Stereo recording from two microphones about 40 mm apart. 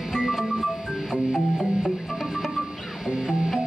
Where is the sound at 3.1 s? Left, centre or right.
Centre.